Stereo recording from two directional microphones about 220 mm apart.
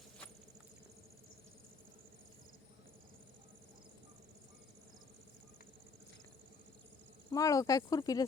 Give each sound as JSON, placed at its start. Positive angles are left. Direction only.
{"t": 7.3, "sound": "speech", "side_deg": 15}